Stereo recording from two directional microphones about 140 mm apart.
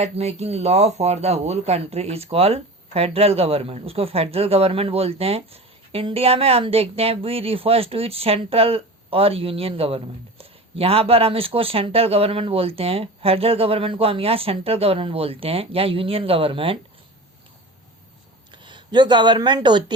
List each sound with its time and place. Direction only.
0.0 s speech: 50° right (ahead or behind)
18.5 s speech: 35° right (ahead or behind)